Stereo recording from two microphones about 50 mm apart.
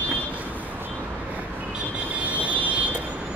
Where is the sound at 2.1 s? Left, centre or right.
Right.